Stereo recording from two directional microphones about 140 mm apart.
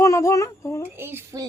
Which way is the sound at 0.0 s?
20° left (ahead or behind).